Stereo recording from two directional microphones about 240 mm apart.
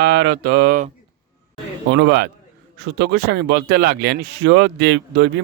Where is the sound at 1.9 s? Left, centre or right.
Right.